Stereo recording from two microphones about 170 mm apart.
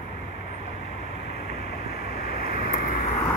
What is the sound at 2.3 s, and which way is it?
Vehicle, 60° left (ahead or behind).